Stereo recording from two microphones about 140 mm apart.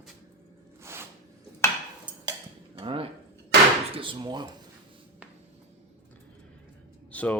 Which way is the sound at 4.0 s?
35° right (ahead or behind).